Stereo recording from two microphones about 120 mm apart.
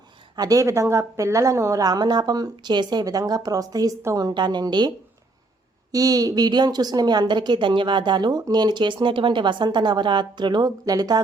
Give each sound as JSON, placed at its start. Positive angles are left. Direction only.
{"t": 0.3, "sound": "a woman's voice", "side_deg": -30}
{"t": 5.9, "sound": "a woman's voice", "side_deg": -30}